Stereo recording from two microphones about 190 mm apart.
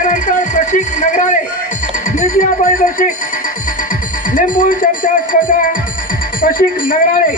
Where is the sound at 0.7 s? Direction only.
40° left (ahead or behind).